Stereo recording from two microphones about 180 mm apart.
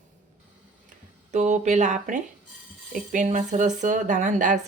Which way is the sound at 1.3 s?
40° right (ahead or behind).